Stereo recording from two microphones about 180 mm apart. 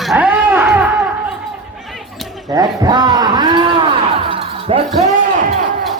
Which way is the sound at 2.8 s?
25° right (ahead or behind).